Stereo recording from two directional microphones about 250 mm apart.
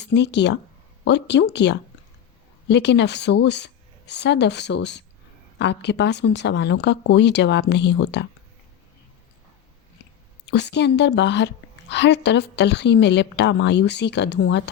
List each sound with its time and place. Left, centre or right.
0.0 s a woman's voice: left
10.4 s a woman's voice: left